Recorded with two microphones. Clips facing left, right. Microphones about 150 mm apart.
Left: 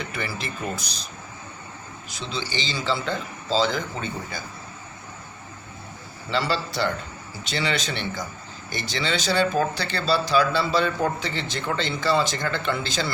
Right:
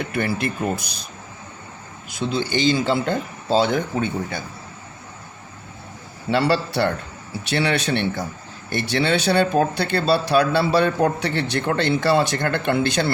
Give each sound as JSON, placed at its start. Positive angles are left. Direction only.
{"t": 0.0, "sound": "a man's voice", "side_deg": -55}
{"t": 2.0, "sound": "a man's voice", "side_deg": -55}
{"t": 6.3, "sound": "a man's voice", "side_deg": -65}